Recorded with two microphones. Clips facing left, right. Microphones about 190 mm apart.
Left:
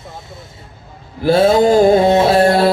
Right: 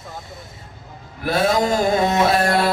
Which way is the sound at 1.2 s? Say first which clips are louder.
Left 8 dB; 30° left (ahead or behind).